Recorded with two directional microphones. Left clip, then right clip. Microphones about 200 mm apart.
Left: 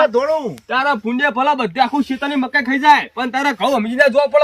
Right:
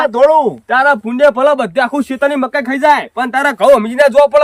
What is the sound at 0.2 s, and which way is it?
Speech, 20° right (ahead or behind).